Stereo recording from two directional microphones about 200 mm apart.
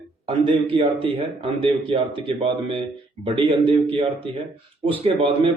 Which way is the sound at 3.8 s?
25° right (ahead or behind).